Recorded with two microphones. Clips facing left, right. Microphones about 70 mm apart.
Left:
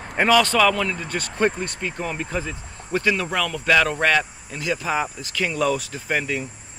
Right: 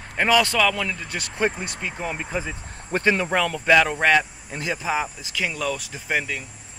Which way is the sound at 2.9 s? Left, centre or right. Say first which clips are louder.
Right 1 dB; right.